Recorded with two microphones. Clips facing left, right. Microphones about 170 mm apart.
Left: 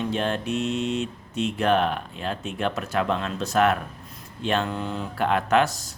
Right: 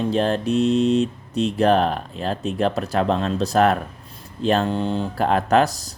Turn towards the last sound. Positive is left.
turn(degrees=-35)  # may be behind; listen again after turning